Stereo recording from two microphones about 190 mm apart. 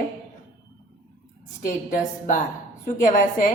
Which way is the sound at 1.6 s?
45° left (ahead or behind).